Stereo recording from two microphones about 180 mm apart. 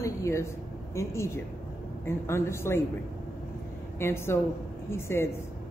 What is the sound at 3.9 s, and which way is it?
A woman's voice, 15° left (ahead or behind).